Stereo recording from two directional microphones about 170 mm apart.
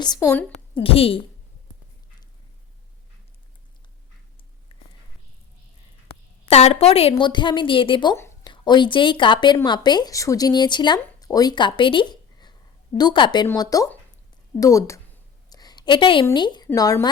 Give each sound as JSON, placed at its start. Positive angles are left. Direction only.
{"t": 0.0, "sound": "a woman's voice", "side_deg": 20}
{"t": 0.8, "sound": "a woman's voice", "side_deg": 35}
{"t": 4.7, "sound": "a sound", "side_deg": 30}
{"t": 6.4, "sound": "a woman's voice", "side_deg": 35}
{"t": 15.4, "sound": "a sound", "side_deg": 25}
{"t": 16.2, "sound": "speech", "side_deg": 25}